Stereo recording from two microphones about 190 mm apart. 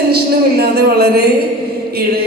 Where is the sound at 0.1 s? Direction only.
55° right (ahead or behind).